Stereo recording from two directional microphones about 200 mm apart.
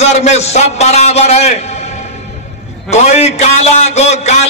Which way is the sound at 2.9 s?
35° left (ahead or behind).